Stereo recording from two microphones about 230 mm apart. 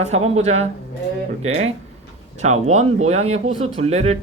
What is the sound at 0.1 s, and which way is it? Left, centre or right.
Speech, right.